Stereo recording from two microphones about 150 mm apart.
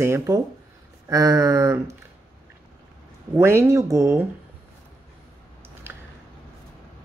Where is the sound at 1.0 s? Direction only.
20° right (ahead or behind).